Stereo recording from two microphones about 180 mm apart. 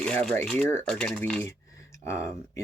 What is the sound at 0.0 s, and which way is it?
Speech, 5° left (ahead or behind).